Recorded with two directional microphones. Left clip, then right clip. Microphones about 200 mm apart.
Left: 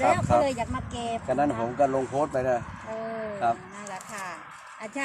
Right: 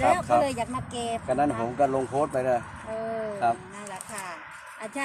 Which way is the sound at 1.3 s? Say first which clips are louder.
Even; 15° left (ahead or behind).